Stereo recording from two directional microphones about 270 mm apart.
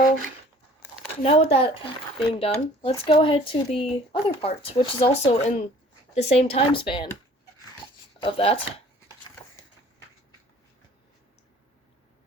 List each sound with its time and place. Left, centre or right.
1.1 s speech: left
8.2 s speech: left